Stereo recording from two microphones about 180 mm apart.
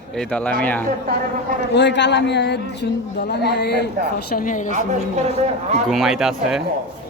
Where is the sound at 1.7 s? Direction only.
75° left (ahead or behind).